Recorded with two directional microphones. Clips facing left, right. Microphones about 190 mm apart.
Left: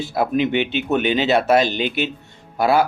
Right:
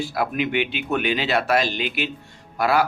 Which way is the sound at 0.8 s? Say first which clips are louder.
Left 5 dB; 25° left (ahead or behind).